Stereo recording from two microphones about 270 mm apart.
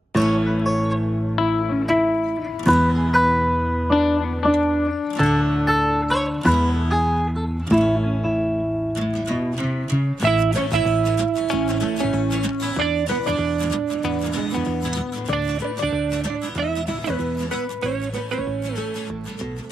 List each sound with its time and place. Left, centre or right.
0.1 s music: centre
10.2 s music: centre